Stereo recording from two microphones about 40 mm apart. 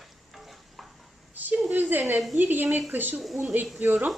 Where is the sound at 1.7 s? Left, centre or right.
Right.